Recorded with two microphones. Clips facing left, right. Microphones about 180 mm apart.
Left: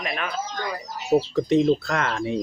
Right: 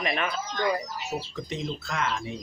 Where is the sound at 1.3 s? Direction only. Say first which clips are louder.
Left 14 dB; 65° left (ahead or behind).